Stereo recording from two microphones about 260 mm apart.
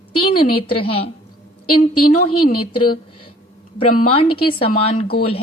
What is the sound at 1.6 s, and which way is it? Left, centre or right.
Speech, left.